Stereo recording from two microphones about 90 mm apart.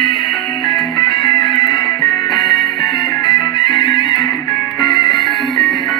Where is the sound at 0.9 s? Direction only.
65° left (ahead or behind).